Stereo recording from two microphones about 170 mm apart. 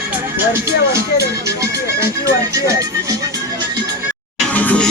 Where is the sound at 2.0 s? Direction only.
20° right (ahead or behind).